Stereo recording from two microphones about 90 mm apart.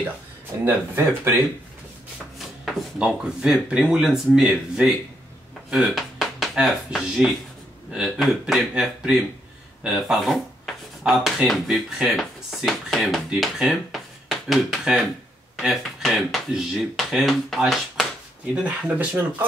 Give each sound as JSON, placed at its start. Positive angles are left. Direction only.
{"t": 0.7, "sound": "speech", "side_deg": -25}
{"t": 2.3, "sound": "speech", "side_deg": 0}
{"t": 18.5, "sound": "speech", "side_deg": -10}